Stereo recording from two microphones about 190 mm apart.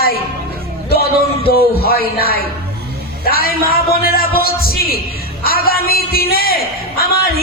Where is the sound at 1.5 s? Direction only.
55° left (ahead or behind).